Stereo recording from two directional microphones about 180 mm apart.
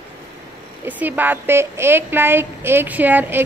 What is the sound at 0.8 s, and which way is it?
A woman's voice, 10° right (ahead or behind).